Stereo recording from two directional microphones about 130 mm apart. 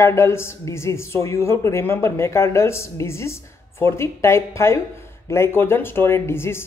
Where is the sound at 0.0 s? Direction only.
20° left (ahead or behind).